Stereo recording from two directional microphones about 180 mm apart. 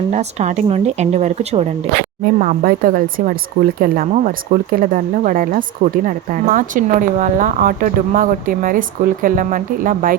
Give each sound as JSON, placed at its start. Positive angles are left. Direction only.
{"t": 0.1, "sound": "speech", "side_deg": -40}
{"t": 2.2, "sound": "speech", "side_deg": -50}